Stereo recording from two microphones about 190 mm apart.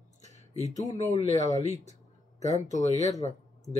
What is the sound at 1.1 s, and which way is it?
Speech, 35° left (ahead or behind).